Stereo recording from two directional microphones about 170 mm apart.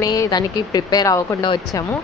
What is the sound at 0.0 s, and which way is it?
Speech, 20° left (ahead or behind).